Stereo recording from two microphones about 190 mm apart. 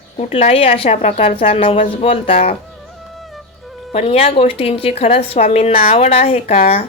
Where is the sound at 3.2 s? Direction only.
Centre (ahead or behind).